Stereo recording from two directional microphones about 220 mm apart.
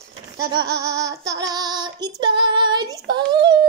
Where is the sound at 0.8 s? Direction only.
15° right (ahead or behind).